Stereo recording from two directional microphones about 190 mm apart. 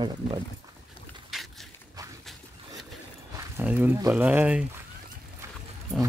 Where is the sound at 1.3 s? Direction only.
Centre (ahead or behind).